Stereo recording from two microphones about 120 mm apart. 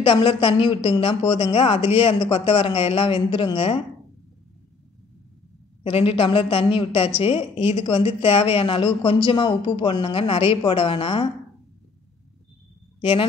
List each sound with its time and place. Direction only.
0.0 s speech: 45° left (ahead or behind)
5.9 s speech: 55° left (ahead or behind)